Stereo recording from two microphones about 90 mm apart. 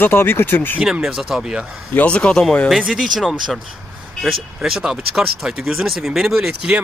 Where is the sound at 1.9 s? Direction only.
15° left (ahead or behind).